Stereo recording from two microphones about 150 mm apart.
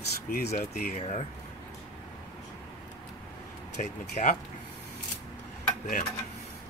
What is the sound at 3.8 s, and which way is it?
Speech, 55° left (ahead or behind).